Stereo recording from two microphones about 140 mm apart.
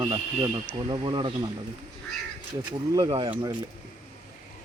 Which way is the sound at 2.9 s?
25° right (ahead or behind).